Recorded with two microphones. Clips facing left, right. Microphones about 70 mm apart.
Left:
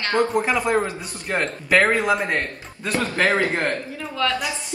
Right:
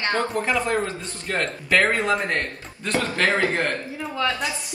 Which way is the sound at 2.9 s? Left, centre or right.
Left.